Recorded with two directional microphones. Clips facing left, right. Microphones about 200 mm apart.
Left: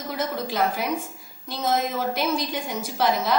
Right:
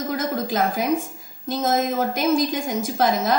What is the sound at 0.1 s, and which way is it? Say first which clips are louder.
A woman's voice: right 1 dB; 45° right (ahead or behind).